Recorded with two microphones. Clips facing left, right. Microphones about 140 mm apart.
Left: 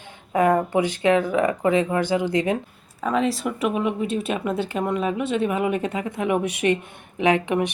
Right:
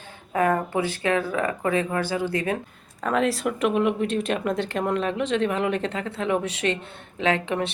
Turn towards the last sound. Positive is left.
turn(degrees=15)  # may be behind; listen again after turning